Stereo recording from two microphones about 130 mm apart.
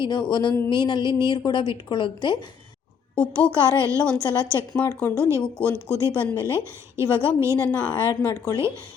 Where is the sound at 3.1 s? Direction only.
10° left (ahead or behind).